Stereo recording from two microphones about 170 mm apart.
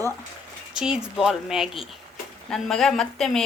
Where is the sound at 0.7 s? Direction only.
5° right (ahead or behind).